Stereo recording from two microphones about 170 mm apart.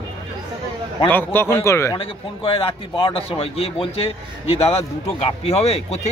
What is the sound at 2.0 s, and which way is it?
Speech, 35° left (ahead or behind).